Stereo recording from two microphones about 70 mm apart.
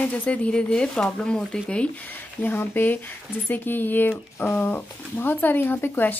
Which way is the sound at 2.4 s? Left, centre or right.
Left.